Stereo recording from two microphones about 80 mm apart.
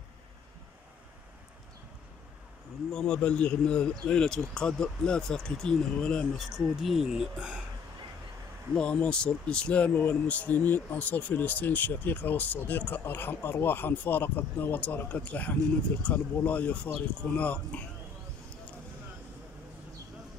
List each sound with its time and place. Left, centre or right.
2.9 s speech: centre
6.8 s speech: centre
8.7 s speech: centre